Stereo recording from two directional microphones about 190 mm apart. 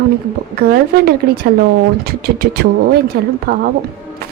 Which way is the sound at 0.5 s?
55° right (ahead or behind).